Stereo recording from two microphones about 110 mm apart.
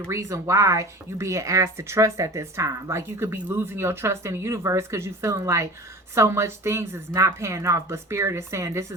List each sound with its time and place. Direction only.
0.1 s speech: 25° right (ahead or behind)